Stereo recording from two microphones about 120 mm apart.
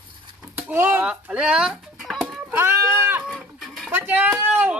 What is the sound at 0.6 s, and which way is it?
Speech, 15° right (ahead or behind).